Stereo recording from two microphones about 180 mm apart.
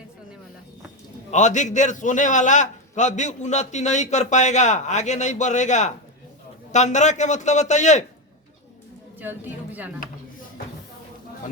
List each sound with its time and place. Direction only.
1.3 s a man's voice: 40° left (ahead or behind)